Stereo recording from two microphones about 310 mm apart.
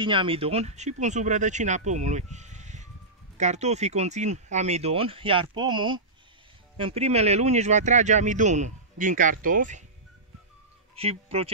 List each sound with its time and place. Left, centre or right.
0.0 s speech: centre
11.0 s speech: centre